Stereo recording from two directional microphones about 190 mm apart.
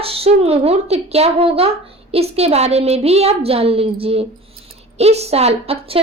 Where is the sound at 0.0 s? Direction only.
30° right (ahead or behind).